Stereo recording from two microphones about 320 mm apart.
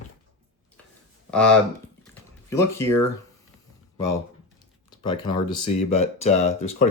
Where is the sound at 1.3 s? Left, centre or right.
Centre.